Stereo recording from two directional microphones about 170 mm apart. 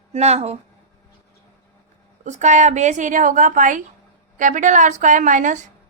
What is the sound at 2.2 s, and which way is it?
A woman's voice, 45° right (ahead or behind).